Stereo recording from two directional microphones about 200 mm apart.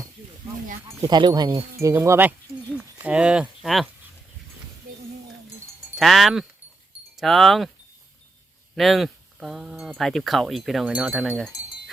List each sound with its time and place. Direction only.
0.9 s speech: 20° right (ahead or behind); by 3.8 s centre (ahead or behind)
6.0 s speech: centre (ahead or behind)
8.7 s speech: centre (ahead or behind)